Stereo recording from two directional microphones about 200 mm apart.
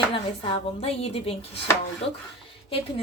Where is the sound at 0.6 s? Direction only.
30° left (ahead or behind).